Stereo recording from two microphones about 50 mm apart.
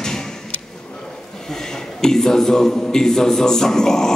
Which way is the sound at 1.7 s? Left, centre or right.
Centre.